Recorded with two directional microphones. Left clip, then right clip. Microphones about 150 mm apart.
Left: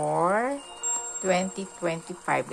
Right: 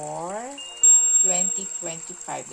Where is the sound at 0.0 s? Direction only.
20° left (ahead or behind).